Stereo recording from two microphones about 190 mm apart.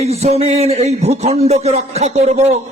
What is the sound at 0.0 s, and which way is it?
A man's voice, 35° right (ahead or behind).